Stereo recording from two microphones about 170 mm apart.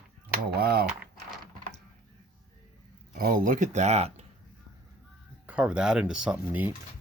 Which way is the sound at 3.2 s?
55° right (ahead or behind).